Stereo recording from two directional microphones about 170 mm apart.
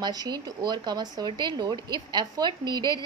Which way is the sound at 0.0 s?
25° right (ahead or behind).